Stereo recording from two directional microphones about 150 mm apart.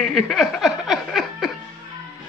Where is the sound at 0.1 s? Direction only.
Centre (ahead or behind).